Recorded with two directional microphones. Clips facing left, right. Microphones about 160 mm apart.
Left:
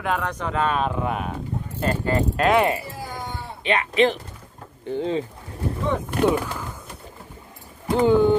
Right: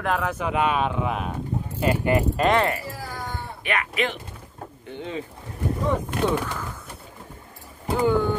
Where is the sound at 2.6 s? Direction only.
20° left (ahead or behind).